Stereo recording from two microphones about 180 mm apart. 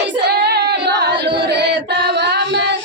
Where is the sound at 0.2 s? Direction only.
65° right (ahead or behind).